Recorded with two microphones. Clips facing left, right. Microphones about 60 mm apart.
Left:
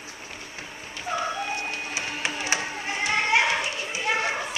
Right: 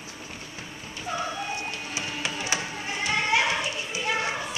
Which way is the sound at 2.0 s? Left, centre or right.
Left.